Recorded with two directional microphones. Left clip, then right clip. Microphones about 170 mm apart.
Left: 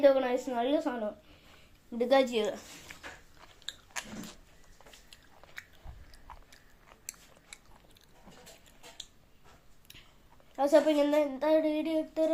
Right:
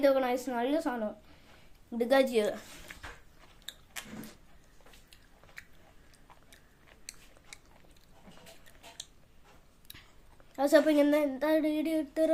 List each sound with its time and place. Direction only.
0.0 s speech: 30° right (ahead or behind)
7.1 s biting: 5° right (ahead or behind)
10.5 s speech: 20° right (ahead or behind)